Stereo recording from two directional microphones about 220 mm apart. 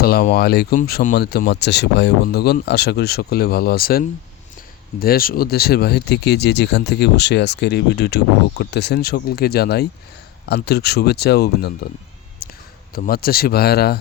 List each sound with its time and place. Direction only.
0.0 s speech: 45° left (ahead or behind)
12.4 s a sound: 40° left (ahead or behind)
12.9 s speech: 45° left (ahead or behind)